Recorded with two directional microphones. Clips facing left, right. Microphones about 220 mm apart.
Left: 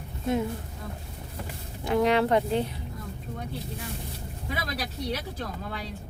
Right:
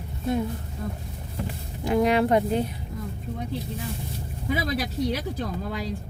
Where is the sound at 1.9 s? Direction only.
10° right (ahead or behind).